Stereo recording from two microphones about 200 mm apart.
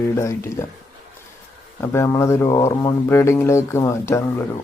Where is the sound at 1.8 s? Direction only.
15° left (ahead or behind).